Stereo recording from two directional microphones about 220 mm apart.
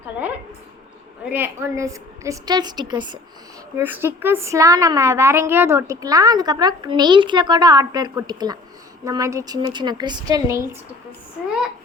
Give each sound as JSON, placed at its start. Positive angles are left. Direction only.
{"t": 1.3, "sound": "a woman's voice", "side_deg": -10}